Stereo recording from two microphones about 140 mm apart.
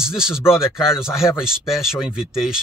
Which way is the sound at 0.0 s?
5° right (ahead or behind).